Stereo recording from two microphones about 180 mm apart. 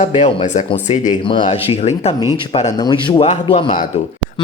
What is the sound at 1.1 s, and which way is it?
Speech, 25° left (ahead or behind).